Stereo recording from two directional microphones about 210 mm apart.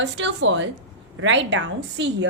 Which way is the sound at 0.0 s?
60° right (ahead or behind).